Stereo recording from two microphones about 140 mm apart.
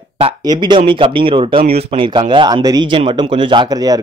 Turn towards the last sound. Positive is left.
turn(degrees=-30)  # may be behind; listen again after turning